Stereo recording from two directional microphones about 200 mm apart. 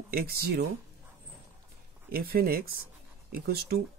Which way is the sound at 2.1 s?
50° right (ahead or behind).